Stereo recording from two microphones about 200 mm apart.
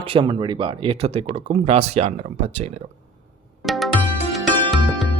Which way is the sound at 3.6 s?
Centre (ahead or behind).